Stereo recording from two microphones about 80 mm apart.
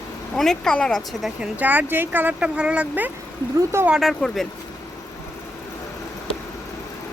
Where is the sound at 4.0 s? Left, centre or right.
Centre.